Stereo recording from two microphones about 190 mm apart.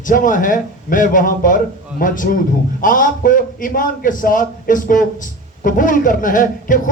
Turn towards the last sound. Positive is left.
turn(degrees=45)  # may be behind; listen again after turning